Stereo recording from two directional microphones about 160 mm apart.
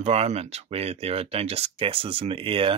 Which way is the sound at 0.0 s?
45° right (ahead or behind).